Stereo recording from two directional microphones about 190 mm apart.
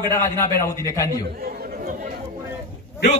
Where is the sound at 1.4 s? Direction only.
50° right (ahead or behind).